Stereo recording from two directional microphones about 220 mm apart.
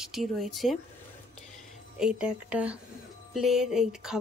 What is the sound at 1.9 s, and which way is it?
Speech, 5° right (ahead or behind).